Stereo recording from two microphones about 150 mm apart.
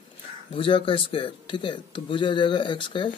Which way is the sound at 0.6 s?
35° left (ahead or behind).